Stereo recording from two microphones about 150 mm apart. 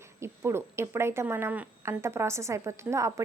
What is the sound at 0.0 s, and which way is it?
Speech, 15° right (ahead or behind).